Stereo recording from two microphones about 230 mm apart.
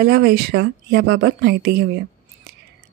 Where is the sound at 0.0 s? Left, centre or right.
Right.